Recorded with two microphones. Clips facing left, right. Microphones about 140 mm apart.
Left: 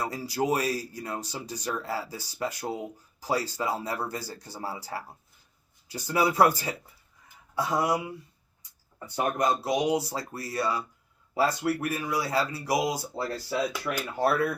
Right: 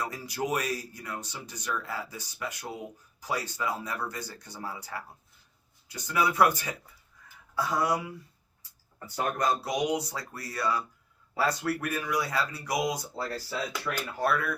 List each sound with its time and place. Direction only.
0.0 s speech: 35° left (ahead or behind)
9.1 s speech: 20° left (ahead or behind)